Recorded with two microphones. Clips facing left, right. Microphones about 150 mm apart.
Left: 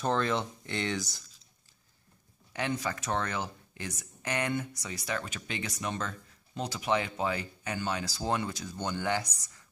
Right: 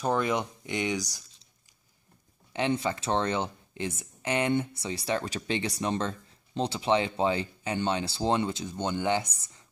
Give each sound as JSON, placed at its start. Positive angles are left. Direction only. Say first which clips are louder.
{"t": 0.0, "sound": "speech", "louder": "right 2 dB", "side_deg": -10}
{"t": 2.5, "sound": "speech", "louder": "right 5 dB", "side_deg": -25}